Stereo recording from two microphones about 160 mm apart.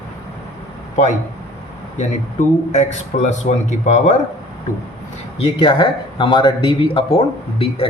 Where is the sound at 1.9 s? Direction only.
45° left (ahead or behind).